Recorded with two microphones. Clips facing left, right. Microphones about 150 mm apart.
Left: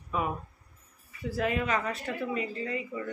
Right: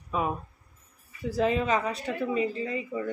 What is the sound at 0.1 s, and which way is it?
Speech, 20° right (ahead or behind).